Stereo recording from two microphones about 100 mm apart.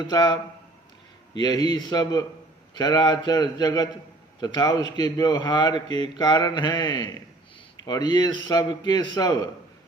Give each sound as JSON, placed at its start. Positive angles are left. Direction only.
{"t": 0.0, "sound": "a man's voice", "side_deg": 45}
{"t": 1.4, "sound": "a man's voice", "side_deg": 45}